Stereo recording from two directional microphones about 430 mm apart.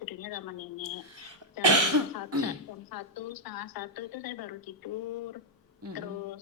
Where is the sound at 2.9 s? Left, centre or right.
Left.